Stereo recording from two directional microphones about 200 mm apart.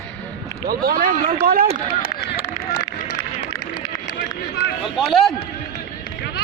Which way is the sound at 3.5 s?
20° left (ahead or behind).